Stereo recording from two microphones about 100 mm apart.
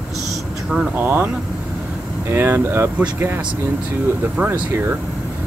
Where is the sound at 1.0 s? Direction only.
20° right (ahead or behind).